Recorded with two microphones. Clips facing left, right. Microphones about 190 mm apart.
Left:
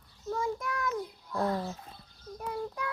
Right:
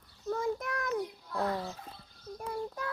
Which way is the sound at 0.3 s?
60° right (ahead or behind).